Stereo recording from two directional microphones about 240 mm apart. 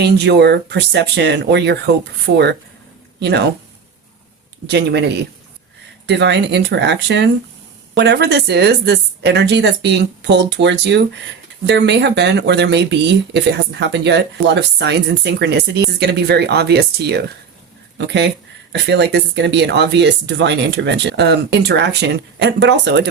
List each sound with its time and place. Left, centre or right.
0.0 s speech: right
3.2 s speech: right
4.6 s speech: right